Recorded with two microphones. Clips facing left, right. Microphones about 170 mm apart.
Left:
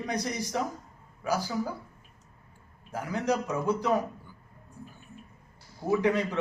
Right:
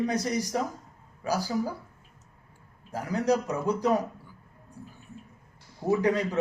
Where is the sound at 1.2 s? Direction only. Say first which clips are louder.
Right 1 dB; 35° right (ahead or behind).